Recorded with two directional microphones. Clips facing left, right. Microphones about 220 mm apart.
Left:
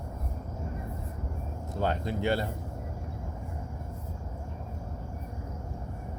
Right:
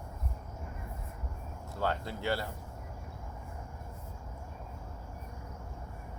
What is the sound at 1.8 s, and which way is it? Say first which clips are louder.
Speech: left 4 dB; 20° left (ahead or behind).